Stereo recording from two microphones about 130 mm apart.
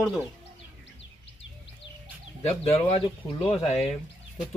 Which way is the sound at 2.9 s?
45° left (ahead or behind).